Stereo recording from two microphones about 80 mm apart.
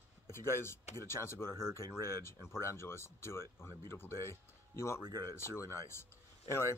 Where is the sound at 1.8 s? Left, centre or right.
Right.